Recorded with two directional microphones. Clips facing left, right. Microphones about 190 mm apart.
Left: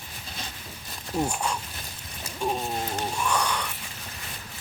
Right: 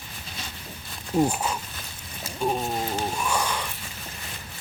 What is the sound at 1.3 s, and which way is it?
Speech, 5° right (ahead or behind).